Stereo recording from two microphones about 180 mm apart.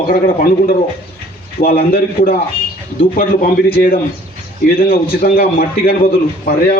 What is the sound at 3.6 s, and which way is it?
Speech, 55° left (ahead or behind).